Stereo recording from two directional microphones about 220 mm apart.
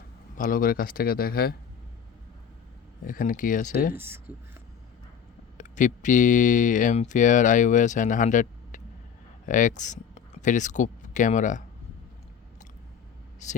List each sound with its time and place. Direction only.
0.3 s speech: 40° left (ahead or behind)
3.1 s speech: 40° left (ahead or behind)
3.9 s speech: 10° right (ahead or behind)
5.5 s speech: 35° left (ahead or behind)
13.4 s speech: 35° left (ahead or behind)